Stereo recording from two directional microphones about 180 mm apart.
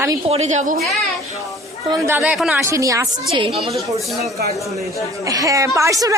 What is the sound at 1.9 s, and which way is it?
Speech, 15° right (ahead or behind).